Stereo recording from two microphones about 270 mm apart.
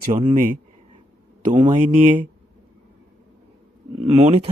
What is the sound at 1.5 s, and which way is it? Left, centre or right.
Speech, centre.